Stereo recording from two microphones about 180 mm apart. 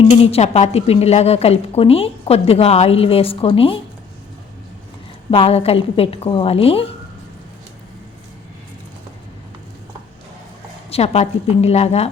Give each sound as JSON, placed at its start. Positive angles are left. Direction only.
{"t": 0.0, "sound": "a woman's voice", "side_deg": 35}
{"t": 5.3, "sound": "a woman's voice", "side_deg": 30}
{"t": 10.8, "sound": "a woman's voice", "side_deg": 35}